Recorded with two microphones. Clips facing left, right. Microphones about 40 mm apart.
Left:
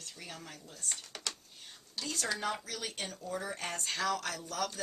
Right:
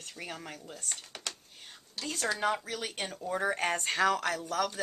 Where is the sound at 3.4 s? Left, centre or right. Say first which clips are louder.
Right 8 dB; right.